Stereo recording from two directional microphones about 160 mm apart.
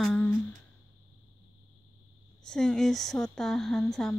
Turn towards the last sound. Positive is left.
turn(degrees=5)  # may be behind; listen again after turning